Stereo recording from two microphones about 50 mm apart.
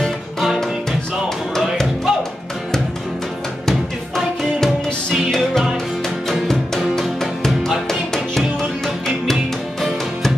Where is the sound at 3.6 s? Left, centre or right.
Centre.